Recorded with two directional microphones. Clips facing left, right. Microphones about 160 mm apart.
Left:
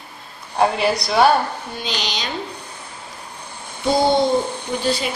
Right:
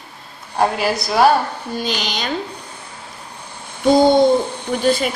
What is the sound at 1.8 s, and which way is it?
Speech, 50° right (ahead or behind).